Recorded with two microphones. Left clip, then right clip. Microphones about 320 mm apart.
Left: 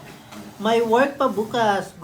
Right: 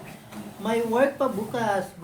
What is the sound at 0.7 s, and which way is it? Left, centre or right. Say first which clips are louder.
Speech: left 5 dB; left.